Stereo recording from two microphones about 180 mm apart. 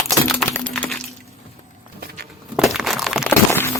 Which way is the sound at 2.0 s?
55° right (ahead or behind).